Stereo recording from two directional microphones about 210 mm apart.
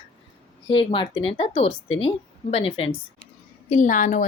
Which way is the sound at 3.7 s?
40° left (ahead or behind).